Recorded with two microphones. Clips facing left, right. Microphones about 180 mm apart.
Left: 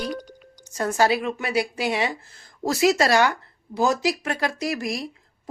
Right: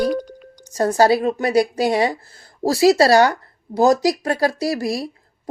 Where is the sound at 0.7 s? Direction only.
35° right (ahead or behind).